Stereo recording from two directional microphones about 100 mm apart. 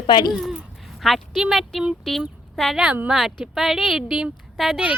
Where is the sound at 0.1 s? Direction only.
45° left (ahead or behind).